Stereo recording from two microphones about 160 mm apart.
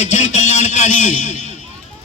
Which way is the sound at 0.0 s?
45° left (ahead or behind).